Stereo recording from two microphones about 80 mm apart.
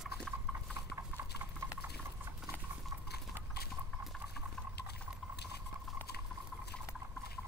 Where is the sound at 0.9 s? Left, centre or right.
Right.